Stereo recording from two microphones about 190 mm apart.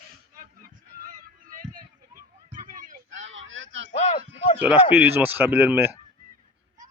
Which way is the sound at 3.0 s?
75° right (ahead or behind).